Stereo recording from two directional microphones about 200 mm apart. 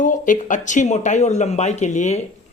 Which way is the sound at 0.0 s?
40° left (ahead or behind).